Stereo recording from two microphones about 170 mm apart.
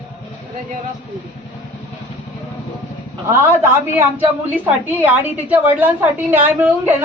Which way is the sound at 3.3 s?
15° right (ahead or behind).